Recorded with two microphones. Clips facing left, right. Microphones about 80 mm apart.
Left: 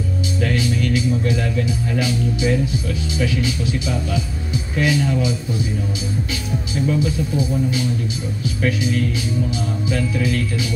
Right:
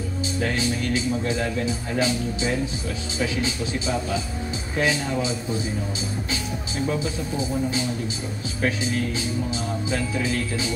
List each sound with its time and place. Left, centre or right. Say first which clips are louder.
0.4 s speech: left 4 dB; right
4.7 s speech: left 4 dB; right
6.9 s speech: left 7 dB; right